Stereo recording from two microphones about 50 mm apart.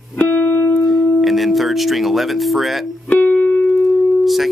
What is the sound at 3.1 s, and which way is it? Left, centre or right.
Music, left.